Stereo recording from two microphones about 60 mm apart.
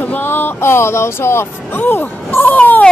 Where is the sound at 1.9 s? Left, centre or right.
Left.